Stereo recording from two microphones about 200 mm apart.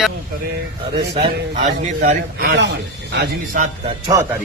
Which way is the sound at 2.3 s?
55° right (ahead or behind).